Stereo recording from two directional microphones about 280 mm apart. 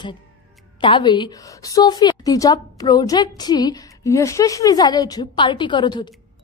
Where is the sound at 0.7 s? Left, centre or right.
Centre.